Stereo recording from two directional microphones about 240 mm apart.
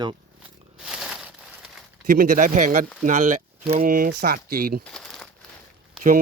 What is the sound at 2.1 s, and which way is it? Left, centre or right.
Speech, right.